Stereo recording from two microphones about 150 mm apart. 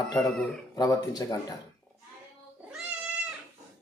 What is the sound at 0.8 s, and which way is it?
Speech, 25° left (ahead or behind).